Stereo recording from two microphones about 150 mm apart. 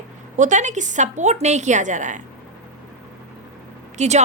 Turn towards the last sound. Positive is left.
turn(degrees=-50)  # may be behind; listen again after turning